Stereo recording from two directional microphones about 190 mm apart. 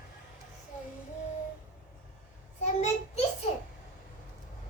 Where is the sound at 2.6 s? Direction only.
35° left (ahead or behind).